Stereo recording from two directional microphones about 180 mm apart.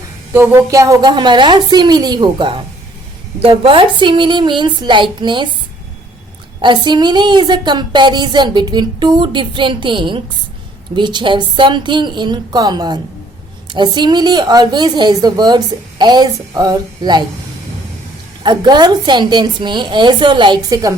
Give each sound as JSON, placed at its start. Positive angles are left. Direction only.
{"t": 0.3, "sound": "a woman's voice", "side_deg": -10}
{"t": 6.6, "sound": "a woman's voice", "side_deg": -25}
{"t": 18.4, "sound": "a woman's voice", "side_deg": -25}